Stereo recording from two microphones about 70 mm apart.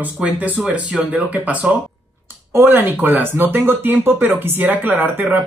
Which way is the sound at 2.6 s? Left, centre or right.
Right.